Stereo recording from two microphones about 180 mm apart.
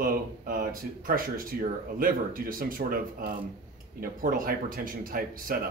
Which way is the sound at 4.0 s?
55° right (ahead or behind).